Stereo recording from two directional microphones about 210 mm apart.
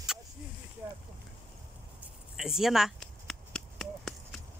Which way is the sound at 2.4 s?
Centre (ahead or behind).